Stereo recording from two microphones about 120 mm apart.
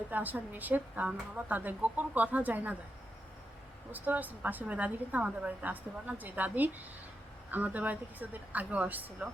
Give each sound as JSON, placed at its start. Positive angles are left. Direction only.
{"t": 0.1, "sound": "a woman's voice", "side_deg": -15}
{"t": 3.9, "sound": "a woman's voice", "side_deg": -15}